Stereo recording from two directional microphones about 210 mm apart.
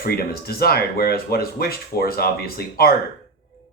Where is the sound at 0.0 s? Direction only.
45° left (ahead or behind).